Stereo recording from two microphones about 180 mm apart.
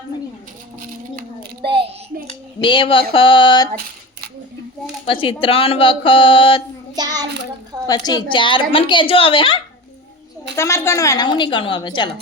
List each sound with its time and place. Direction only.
2.6 s a woman's voice: 30° left (ahead or behind)
5.0 s a woman's voice: 30° left (ahead or behind)
6.9 s child singing: 20° right (ahead or behind)
7.9 s a woman's voice: 20° left (ahead or behind)
10.5 s a woman's voice: 15° left (ahead or behind)